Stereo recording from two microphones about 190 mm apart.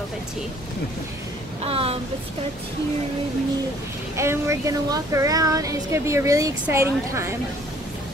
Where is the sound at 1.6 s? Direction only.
30° right (ahead or behind).